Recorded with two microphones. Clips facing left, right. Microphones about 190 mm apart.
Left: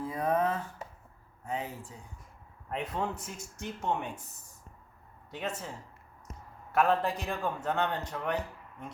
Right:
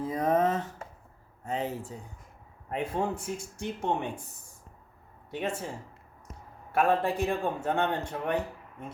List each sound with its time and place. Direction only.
0.0 s a sound: 20° right (ahead or behind)
2.8 s a man's voice: 30° right (ahead or behind)
5.4 s a man's voice: 30° right (ahead or behind)
6.7 s a man's voice: 25° right (ahead or behind)